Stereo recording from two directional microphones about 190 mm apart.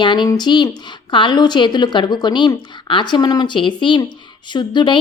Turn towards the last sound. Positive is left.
turn(degrees=25)  # may be behind; listen again after turning